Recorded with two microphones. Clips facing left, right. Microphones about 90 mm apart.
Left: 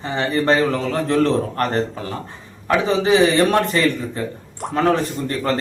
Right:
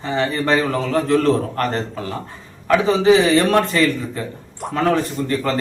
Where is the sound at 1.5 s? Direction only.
25° left (ahead or behind).